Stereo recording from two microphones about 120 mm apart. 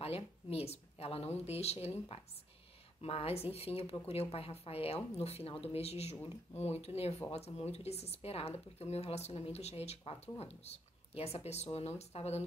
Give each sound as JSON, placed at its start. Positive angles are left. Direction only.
{"t": 0.0, "sound": "speech", "side_deg": 55}